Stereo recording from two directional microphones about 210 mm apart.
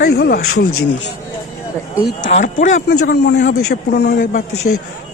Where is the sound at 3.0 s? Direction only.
50° left (ahead or behind).